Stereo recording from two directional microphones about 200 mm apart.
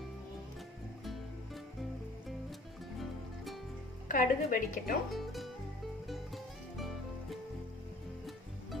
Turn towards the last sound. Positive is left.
turn(degrees=0)  # may be behind; listen again after turning